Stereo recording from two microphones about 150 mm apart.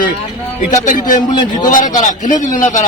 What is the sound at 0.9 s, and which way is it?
A man's voice, 60° left (ahead or behind).